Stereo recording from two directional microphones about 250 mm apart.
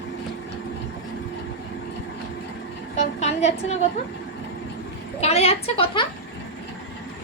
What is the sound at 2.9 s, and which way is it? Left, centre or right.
Speech, left.